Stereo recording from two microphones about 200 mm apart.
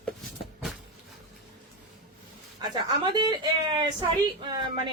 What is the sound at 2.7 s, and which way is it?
A woman's voice, 20° right (ahead or behind).